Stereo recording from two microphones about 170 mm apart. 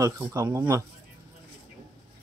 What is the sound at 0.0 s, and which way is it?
Speech, 20° right (ahead or behind).